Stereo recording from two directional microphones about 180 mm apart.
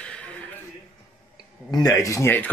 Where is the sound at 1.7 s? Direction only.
20° left (ahead or behind).